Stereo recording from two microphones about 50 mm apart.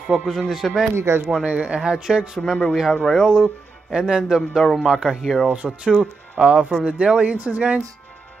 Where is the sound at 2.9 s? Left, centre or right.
Centre.